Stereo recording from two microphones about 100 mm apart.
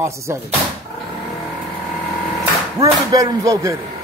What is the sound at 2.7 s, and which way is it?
A man's voice, 35° right (ahead or behind).